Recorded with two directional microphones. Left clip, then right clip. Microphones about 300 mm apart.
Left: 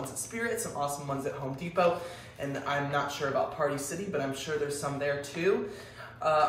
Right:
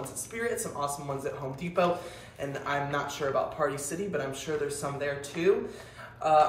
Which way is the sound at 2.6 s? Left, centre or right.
Centre.